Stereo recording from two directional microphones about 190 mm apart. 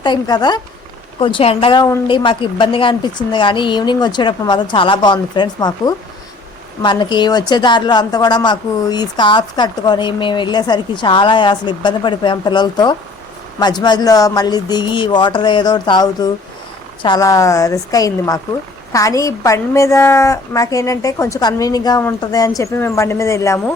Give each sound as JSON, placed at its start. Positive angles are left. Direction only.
{"t": 0.0, "sound": "a woman's voice", "side_deg": 20}